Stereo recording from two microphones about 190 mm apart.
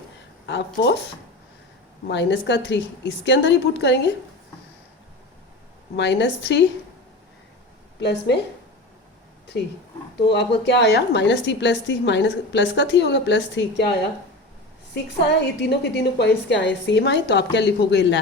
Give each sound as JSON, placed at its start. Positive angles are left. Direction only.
{"t": 0.4, "sound": "a woman's voice", "side_deg": 65}
{"t": 2.0, "sound": "a woman's voice", "side_deg": 65}
{"t": 6.0, "sound": "a woman's voice", "side_deg": 65}
{"t": 10.2, "sound": "a woman's voice", "side_deg": 60}
{"t": 14.9, "sound": "a woman's voice", "side_deg": 65}